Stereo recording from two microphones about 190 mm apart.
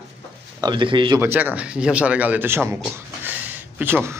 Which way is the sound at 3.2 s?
10° right (ahead or behind).